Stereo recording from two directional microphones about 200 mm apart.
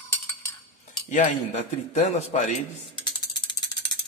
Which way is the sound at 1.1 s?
40° left (ahead or behind).